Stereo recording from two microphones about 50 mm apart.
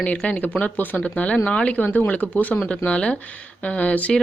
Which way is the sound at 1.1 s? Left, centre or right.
Left.